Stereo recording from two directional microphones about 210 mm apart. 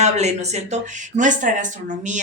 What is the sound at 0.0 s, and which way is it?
Speech, 30° right (ahead or behind).